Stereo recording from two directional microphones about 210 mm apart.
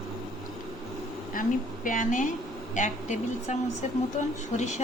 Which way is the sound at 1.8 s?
40° left (ahead or behind).